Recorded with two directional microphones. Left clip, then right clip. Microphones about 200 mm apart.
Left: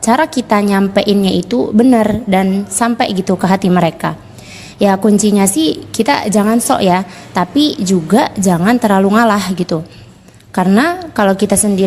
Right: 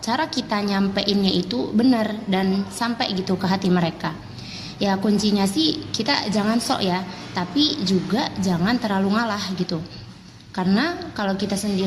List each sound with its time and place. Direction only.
0.1 s a woman's voice: 50° left (ahead or behind)